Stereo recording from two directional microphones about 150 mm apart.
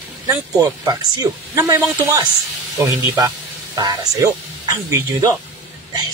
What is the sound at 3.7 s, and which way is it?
Speech, 25° right (ahead or behind).